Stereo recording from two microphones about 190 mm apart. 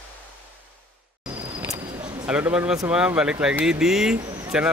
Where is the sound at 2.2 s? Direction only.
5° right (ahead or behind).